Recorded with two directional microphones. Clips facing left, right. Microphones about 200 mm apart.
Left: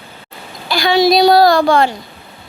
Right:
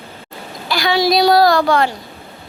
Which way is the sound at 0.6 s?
25° left (ahead or behind).